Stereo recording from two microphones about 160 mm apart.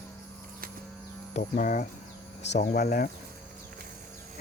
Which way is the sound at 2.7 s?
65° left (ahead or behind).